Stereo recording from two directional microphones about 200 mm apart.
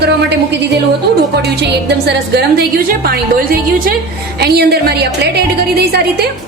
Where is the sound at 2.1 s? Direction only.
50° right (ahead or behind).